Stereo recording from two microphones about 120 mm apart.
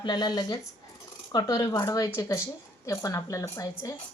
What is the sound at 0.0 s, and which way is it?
A woman's voice, 35° left (ahead or behind).